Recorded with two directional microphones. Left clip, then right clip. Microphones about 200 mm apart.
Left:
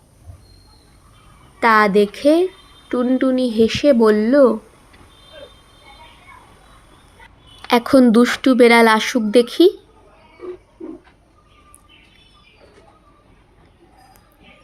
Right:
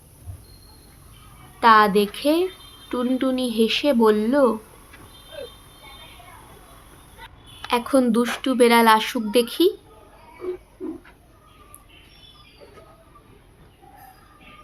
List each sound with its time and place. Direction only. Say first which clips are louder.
1.5 s speech: left 2 dB; 15° left (ahead or behind)
7.7 s a woman's voice: left 7 dB; 25° left (ahead or behind)